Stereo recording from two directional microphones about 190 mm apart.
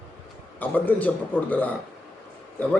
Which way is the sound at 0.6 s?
10° left (ahead or behind).